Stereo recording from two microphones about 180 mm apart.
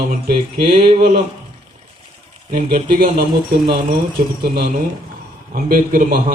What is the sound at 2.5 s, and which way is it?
Speech, 50° right (ahead or behind).